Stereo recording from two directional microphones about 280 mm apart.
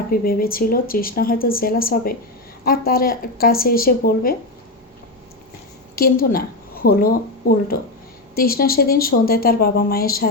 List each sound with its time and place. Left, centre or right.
0.1 s speech: left
6.0 s speech: left